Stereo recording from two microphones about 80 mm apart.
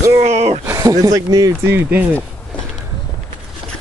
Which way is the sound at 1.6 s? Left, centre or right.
Right.